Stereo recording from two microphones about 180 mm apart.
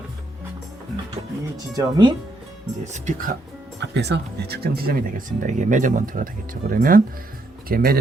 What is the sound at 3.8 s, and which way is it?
Speech, 70° right (ahead or behind).